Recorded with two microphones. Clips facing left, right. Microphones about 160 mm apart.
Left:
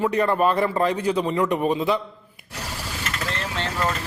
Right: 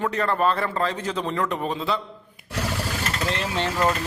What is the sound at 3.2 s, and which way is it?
Vehicle, 20° right (ahead or behind).